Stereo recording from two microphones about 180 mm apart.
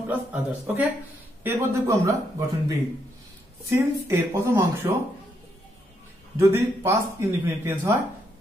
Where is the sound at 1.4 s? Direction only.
15° right (ahead or behind).